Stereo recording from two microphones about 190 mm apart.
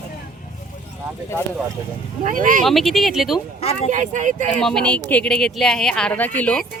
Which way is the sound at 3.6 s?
35° left (ahead or behind).